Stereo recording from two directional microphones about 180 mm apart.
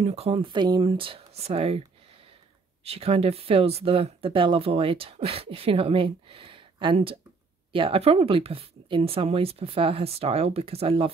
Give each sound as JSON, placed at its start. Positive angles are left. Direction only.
{"t": 0.0, "sound": "speech", "side_deg": -35}
{"t": 2.8, "sound": "speech", "side_deg": -35}